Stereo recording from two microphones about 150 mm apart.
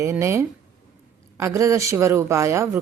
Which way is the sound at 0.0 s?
20° right (ahead or behind).